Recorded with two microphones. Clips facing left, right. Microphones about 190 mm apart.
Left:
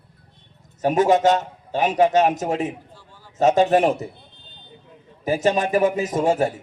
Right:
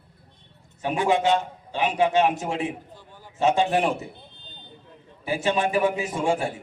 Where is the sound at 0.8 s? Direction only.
40° left (ahead or behind).